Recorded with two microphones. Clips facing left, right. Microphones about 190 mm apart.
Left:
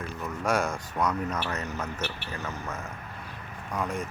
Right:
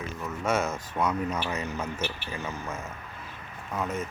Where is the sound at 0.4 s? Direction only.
5° right (ahead or behind).